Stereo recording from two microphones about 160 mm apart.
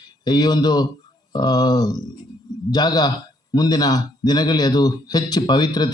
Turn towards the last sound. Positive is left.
turn(degrees=25)  # may be behind; listen again after turning